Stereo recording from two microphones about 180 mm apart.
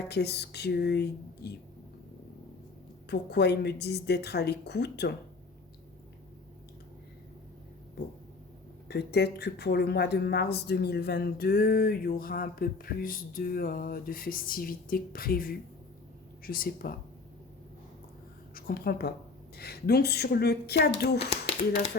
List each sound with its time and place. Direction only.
0.1 s speech: 65° left (ahead or behind)
3.1 s speech: 65° left (ahead or behind)
8.0 s speech: 65° left (ahead or behind)
18.5 s a woman's voice: 55° left (ahead or behind)